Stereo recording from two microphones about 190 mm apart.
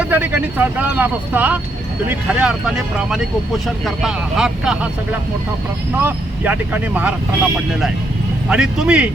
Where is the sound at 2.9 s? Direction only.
Centre (ahead or behind).